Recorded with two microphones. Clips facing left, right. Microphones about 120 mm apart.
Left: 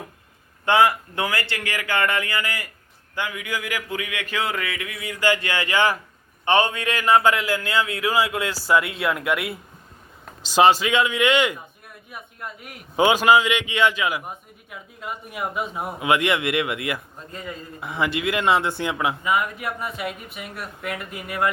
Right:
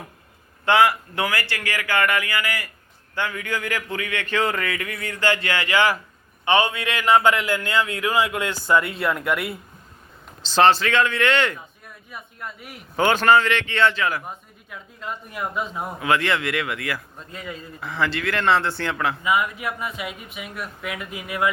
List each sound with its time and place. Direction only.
0.6 s speech: 20° left (ahead or behind)
3.2 s a man's voice: 15° left (ahead or behind)
10.4 s speech: 10° left (ahead or behind)
12.1 s a man's voice: centre (ahead or behind)
13.0 s a man's voice: 10° left (ahead or behind)
16.0 s speech: 20° left (ahead or behind)
17.2 s a man's voice: centre (ahead or behind)
17.7 s speech: 20° left (ahead or behind)
19.6 s a man's voice: centre (ahead or behind)